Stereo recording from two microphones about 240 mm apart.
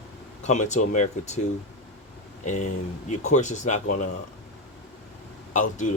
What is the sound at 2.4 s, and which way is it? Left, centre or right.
Speech, left.